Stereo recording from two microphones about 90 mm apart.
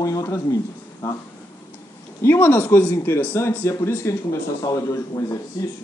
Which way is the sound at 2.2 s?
25° left (ahead or behind).